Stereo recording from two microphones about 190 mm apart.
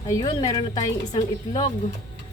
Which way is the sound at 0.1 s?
20° left (ahead or behind).